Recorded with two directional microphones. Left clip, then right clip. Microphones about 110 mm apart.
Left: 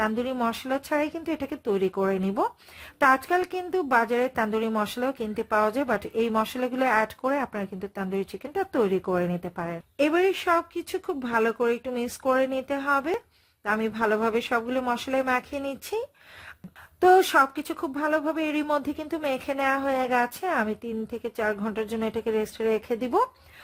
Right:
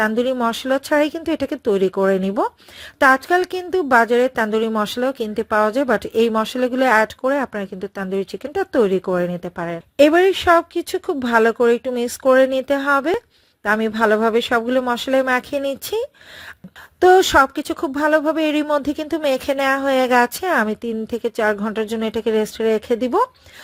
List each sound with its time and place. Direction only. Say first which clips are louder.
0.0 s a woman's voice: right 8 dB; 40° right (ahead or behind)